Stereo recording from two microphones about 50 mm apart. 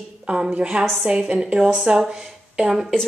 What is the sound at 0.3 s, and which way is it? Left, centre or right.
A woman's voice, centre.